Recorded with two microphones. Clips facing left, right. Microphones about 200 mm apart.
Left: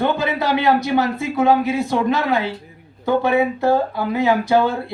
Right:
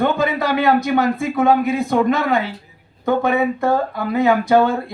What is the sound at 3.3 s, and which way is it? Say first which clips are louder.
Speech: left 1 dB; 30° left (ahead or behind).